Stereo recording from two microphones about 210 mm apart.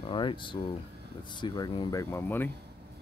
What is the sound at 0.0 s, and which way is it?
Speech, 25° left (ahead or behind).